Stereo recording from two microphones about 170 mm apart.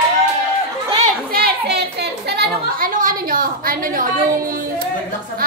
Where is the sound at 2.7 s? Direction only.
55° right (ahead or behind).